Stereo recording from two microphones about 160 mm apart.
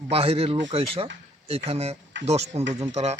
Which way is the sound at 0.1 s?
35° right (ahead or behind).